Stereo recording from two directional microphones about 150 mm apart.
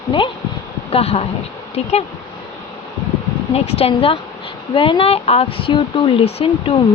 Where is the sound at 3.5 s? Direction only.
40° left (ahead or behind).